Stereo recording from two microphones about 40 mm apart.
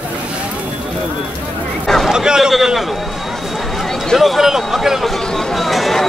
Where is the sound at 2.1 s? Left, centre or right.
Centre.